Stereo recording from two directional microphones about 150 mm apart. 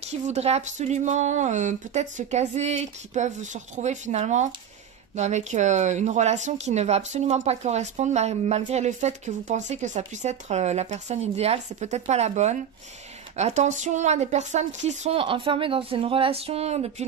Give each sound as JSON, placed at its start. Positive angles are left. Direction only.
{"t": 0.1, "sound": "speech", "side_deg": -50}